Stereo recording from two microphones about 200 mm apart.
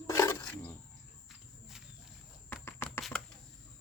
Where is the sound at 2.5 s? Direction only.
10° left (ahead or behind).